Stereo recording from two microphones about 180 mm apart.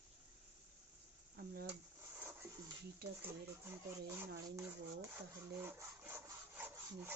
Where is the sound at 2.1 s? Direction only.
10° right (ahead or behind).